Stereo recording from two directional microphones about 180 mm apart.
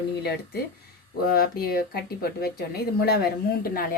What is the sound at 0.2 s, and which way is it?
Speech, 65° left (ahead or behind).